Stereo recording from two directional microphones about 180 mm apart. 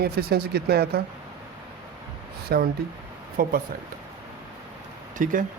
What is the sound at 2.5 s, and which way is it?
Speech, 60° right (ahead or behind).